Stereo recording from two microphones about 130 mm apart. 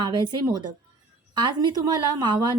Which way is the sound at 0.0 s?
35° right (ahead or behind).